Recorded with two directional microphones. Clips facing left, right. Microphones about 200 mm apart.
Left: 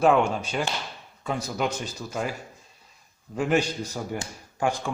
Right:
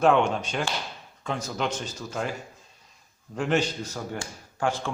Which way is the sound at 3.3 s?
5° left (ahead or behind).